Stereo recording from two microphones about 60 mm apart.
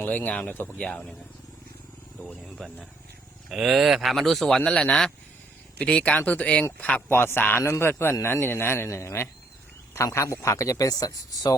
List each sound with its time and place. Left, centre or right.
0.0 s speech: left
3.5 s speech: centre; by 7.0 s left
7.1 s speech: left
7.6 s a man's voice: left
8.2 s speech: left
8.9 s speech: left